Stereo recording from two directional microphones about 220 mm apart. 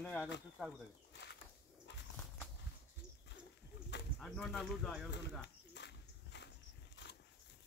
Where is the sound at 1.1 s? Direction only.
50° left (ahead or behind).